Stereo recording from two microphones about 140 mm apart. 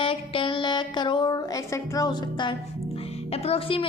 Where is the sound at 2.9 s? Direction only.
45° left (ahead or behind).